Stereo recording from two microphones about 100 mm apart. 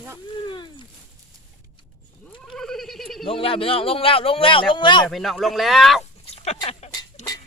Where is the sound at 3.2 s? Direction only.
65° left (ahead or behind).